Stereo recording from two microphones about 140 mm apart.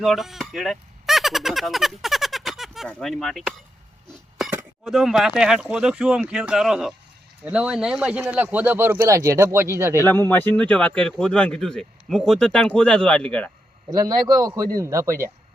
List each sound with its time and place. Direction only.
0.0 s speech: centre (ahead or behind)
4.9 s speech: centre (ahead or behind); by 10.0 s 20° right (ahead or behind)
10.0 s speech: 15° left (ahead or behind)
13.9 s a man's voice: 25° right (ahead or behind)